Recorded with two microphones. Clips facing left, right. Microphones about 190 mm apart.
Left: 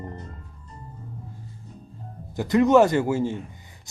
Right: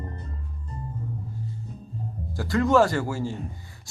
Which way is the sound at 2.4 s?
20° left (ahead or behind).